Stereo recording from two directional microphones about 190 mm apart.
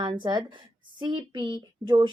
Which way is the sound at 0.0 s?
25° right (ahead or behind).